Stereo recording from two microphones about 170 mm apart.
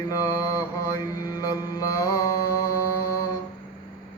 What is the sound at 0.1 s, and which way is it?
Mantra, 20° left (ahead or behind).